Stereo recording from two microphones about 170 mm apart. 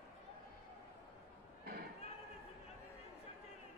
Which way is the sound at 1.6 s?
65° right (ahead or behind).